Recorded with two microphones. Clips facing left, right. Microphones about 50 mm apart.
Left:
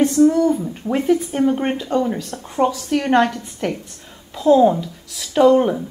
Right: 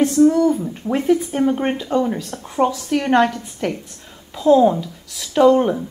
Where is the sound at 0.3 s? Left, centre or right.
Centre.